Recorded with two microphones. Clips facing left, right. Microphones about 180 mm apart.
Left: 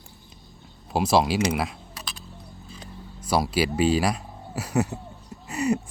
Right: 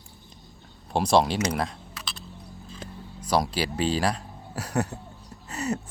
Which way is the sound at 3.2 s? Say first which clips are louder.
Left 2 dB; 5° left (ahead or behind).